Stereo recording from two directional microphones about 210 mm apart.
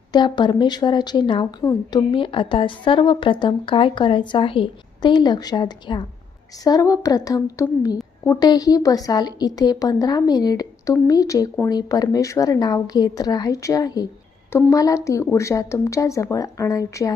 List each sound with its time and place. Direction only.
0.1 s speech: 20° left (ahead or behind)